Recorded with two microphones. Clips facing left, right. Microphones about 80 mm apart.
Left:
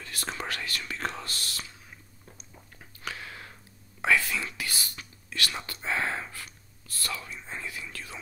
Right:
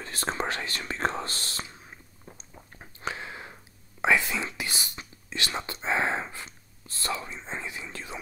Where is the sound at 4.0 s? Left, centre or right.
Right.